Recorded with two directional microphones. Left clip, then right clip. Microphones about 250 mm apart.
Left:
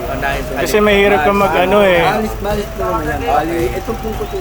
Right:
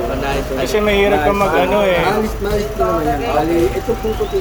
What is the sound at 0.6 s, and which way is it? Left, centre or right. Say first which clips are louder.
Speech: left 4 dB; centre.